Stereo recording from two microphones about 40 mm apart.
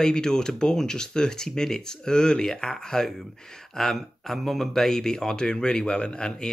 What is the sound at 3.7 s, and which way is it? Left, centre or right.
Speech, centre.